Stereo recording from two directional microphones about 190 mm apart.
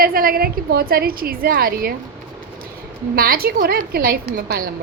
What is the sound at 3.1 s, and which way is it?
A woman's voice, 50° right (ahead or behind).